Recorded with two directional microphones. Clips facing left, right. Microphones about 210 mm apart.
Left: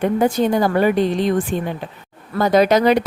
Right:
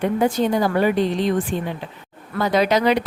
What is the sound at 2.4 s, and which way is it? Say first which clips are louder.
Speech: left 4 dB; 45° left (ahead or behind).